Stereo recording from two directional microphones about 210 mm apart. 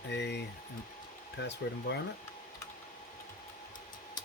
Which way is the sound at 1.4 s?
55° left (ahead or behind).